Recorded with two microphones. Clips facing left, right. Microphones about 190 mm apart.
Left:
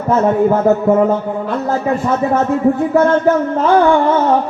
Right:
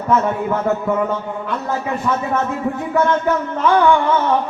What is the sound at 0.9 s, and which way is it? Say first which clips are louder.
Music: left 7 dB; 35° left (ahead or behind).